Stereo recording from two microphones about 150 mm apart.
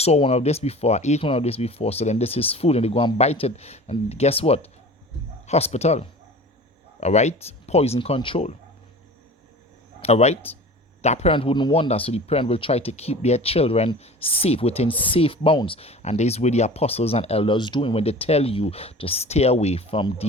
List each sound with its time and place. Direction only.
0.0 s speech: 45° left (ahead or behind)
10.0 s speech: 45° left (ahead or behind)